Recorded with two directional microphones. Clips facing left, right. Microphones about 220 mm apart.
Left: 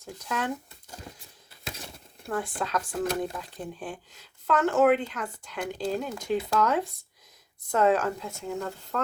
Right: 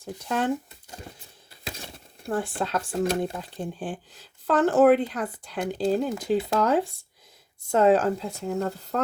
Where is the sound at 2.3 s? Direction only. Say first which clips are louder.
Right 3 dB; 30° right (ahead or behind).